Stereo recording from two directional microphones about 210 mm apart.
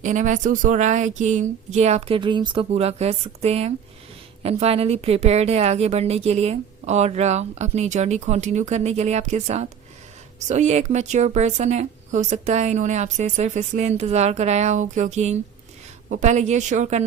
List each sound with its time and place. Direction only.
0.0 s a woman's voice: 35° right (ahead or behind)